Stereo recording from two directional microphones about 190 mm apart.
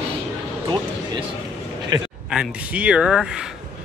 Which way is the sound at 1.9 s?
20° right (ahead or behind).